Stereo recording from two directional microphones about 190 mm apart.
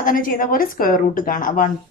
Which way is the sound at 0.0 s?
45° left (ahead or behind).